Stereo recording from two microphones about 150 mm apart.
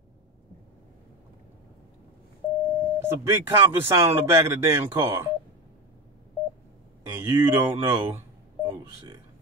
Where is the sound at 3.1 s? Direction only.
15° right (ahead or behind).